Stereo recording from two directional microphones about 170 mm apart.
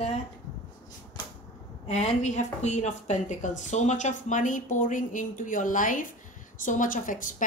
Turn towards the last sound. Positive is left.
turn(degrees=50)  # may be behind; listen again after turning